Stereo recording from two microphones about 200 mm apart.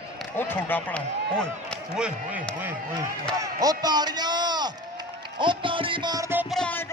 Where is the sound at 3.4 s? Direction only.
20° right (ahead or behind).